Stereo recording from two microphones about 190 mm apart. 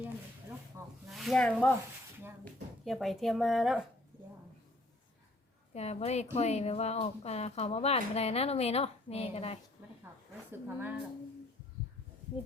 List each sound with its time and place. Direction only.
1.0 s speech: centre (ahead or behind)
5.7 s speech: 35° left (ahead or behind)
10.1 s a sound: 10° right (ahead or behind)
10.5 s speech: 10° right (ahead or behind)